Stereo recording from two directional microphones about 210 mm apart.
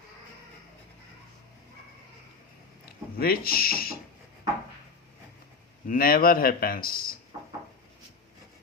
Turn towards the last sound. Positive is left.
turn(degrees=45)  # may be behind; listen again after turning